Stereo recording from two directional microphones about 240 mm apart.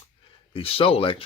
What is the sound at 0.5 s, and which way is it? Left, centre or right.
Speech, left.